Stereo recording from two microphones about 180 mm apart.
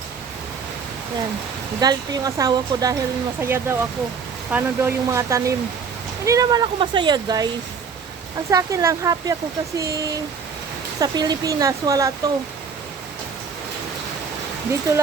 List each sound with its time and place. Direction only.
1.8 s speech: 20° right (ahead or behind)
8.4 s speech: 15° right (ahead or behind)